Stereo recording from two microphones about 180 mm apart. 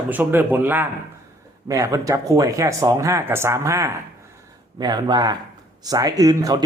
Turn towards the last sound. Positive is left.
turn(degrees=-20)  # may be behind; listen again after turning